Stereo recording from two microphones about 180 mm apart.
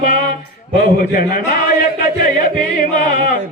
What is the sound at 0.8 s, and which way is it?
A man's voice, 55° left (ahead or behind).